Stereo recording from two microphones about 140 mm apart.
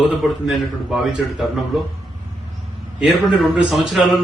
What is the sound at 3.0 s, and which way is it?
A man's voice, 5° right (ahead or behind).